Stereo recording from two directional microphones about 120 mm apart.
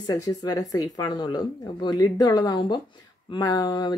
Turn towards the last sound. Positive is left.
turn(degrees=35)  # may be behind; listen again after turning